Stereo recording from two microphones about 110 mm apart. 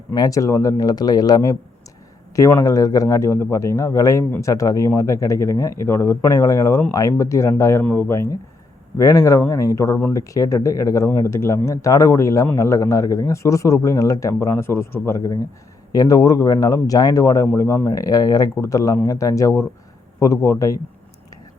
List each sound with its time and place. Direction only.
0.1 s speech: 35° left (ahead or behind)
15.9 s speech: 35° left (ahead or behind)